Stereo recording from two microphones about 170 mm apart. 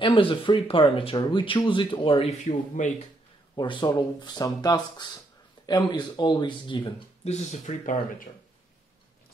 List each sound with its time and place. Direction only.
0.0 s speech: 30° left (ahead or behind); by 2.9 s 45° left (ahead or behind)
3.5 s speech: 25° left (ahead or behind)
7.2 s speech: 40° left (ahead or behind)